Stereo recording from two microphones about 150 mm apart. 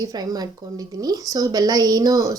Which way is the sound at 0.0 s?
25° right (ahead or behind).